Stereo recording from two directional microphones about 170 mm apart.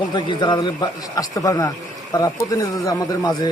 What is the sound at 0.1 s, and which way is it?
A man's voice, 25° left (ahead or behind).